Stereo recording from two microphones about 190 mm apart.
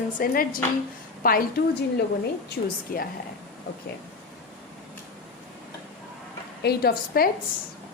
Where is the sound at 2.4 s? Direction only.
55° left (ahead or behind).